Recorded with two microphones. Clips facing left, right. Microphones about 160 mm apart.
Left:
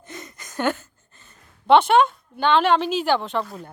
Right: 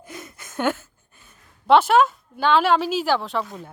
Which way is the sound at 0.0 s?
5° right (ahead or behind).